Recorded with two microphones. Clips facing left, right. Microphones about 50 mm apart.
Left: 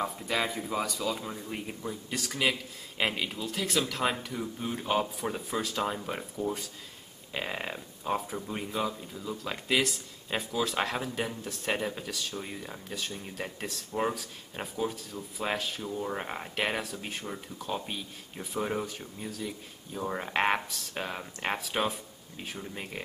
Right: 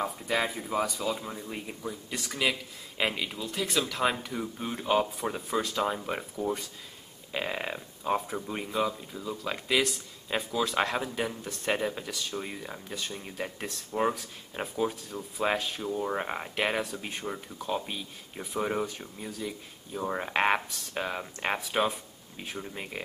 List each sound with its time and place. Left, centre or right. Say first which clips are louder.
0.0 s speech: right 1 dB; centre
1.1 s speech: even; centre
12.4 s speech: right 2 dB; centre
17.3 s speech: right 5 dB; centre
17.6 s speech: right 2 dB; centre